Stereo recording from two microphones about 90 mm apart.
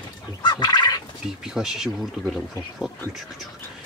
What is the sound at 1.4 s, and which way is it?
Speech, 5° right (ahead or behind).